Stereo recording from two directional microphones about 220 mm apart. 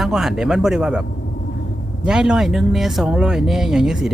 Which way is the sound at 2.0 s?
5° right (ahead or behind).